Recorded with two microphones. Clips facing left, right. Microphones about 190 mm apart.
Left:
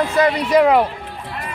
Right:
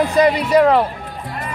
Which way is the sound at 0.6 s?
10° left (ahead or behind).